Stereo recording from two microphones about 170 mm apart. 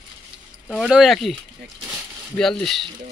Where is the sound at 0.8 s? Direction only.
Centre (ahead or behind).